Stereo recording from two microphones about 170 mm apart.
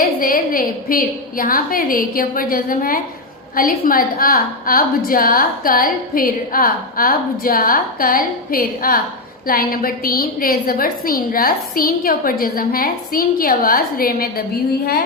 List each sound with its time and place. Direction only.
0.0 s a woman's voice: 55° left (ahead or behind)